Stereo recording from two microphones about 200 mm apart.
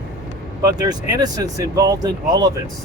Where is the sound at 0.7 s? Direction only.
20° right (ahead or behind).